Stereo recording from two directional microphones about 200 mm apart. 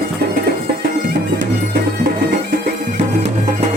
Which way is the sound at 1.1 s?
50° right (ahead or behind).